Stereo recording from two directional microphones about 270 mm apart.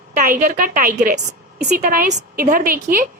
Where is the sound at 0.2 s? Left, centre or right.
Right.